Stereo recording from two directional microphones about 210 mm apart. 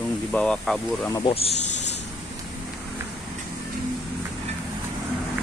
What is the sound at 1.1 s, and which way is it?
Speech, 25° left (ahead or behind).